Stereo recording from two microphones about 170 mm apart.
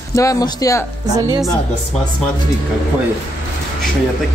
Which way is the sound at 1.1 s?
20° right (ahead or behind).